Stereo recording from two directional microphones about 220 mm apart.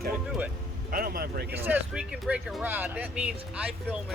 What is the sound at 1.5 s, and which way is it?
Speech, 10° right (ahead or behind).